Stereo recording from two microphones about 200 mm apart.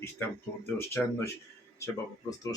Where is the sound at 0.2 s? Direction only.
10° left (ahead or behind).